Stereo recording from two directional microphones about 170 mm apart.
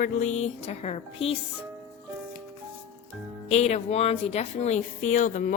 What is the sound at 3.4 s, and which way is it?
Speech, 40° left (ahead or behind).